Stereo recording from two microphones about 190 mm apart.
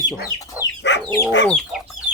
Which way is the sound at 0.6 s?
10° right (ahead or behind).